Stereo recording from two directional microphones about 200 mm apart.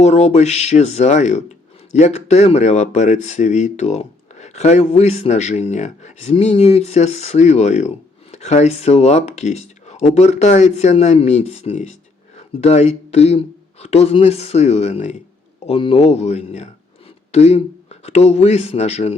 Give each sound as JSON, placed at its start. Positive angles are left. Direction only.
{"t": 0.0, "sound": "speech", "side_deg": 35}